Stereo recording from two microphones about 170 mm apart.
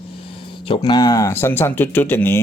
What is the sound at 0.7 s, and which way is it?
Speech, 25° left (ahead or behind).